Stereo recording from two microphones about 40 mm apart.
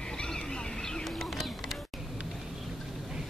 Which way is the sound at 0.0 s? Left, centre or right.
Centre.